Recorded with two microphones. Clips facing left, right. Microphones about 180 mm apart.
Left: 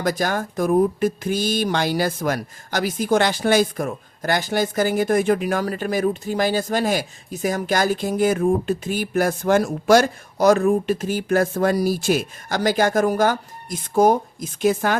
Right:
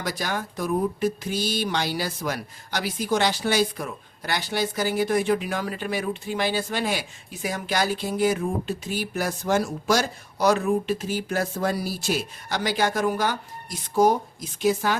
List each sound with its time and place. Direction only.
0.0 s speech: 50° left (ahead or behind)